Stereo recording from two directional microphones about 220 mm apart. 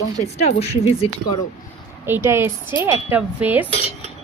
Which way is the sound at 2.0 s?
10° right (ahead or behind).